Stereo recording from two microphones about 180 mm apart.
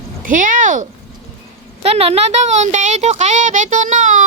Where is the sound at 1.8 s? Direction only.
35° right (ahead or behind).